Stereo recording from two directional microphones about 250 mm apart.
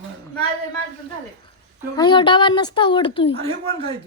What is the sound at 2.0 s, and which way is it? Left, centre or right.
A woman's voice, centre.